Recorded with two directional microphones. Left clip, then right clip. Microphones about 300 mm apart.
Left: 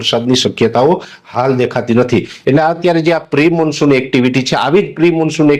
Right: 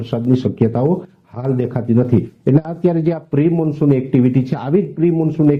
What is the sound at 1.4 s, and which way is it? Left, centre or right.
Speech, centre.